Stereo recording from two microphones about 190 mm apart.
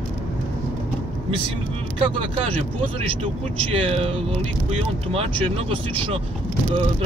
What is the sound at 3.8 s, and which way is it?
Speech, 30° right (ahead or behind).